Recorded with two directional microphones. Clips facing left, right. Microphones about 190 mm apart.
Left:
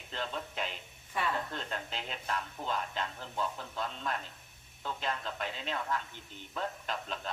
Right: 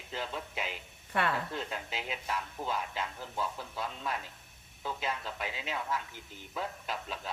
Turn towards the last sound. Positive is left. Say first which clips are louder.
# even
turn(degrees=-5)  # may be behind; listen again after turning